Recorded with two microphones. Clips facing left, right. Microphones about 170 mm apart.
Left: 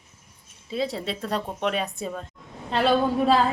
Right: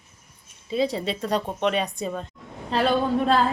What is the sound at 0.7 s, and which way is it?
A woman's voice, centre (ahead or behind).